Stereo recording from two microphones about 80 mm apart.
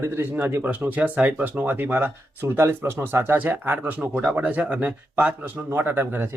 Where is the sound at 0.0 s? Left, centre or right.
Right.